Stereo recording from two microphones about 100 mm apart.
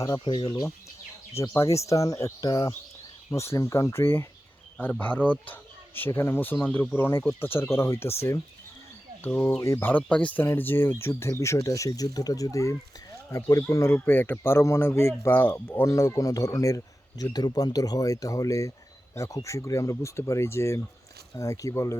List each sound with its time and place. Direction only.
0.0 s speech: 35° left (ahead or behind)
0.3 s speech: 45° left (ahead or behind)
1.4 s speech: 30° left (ahead or behind)
9.2 s speech: 15° left (ahead or behind)
9.6 s speech: 30° left (ahead or behind)
9.9 s speech: 15° left (ahead or behind); by 21.9 s 35° left (ahead or behind)